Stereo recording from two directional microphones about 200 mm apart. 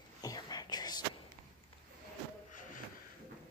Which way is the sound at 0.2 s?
20° left (ahead or behind).